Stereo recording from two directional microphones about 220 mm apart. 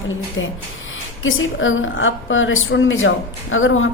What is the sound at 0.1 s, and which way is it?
A woman's voice, 60° left (ahead or behind).